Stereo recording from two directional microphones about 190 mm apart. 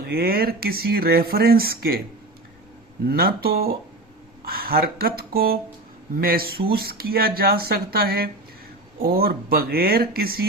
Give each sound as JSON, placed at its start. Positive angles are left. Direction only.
{"t": 0.0, "sound": "speech", "side_deg": -55}
{"t": 3.1, "sound": "speech", "side_deg": -55}